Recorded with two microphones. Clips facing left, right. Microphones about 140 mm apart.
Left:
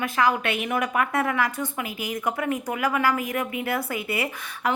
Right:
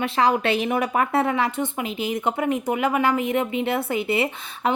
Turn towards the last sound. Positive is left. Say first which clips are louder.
# right 3 dB
turn(degrees=-25)  # may be behind; listen again after turning